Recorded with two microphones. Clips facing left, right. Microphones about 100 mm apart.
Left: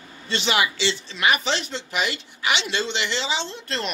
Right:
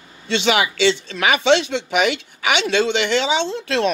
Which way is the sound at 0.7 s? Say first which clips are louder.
Right 8 dB; 70° right (ahead or behind).